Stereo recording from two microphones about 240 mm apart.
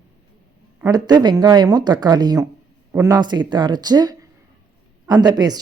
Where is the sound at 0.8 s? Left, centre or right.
Centre.